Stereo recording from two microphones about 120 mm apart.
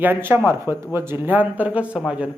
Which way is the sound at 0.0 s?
15° right (ahead or behind).